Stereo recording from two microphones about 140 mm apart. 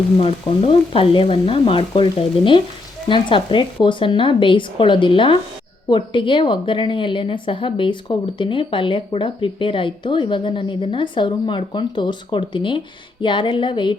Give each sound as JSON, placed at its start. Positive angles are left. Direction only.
{"t": 0.2, "sound": "a woman's voice", "side_deg": 45}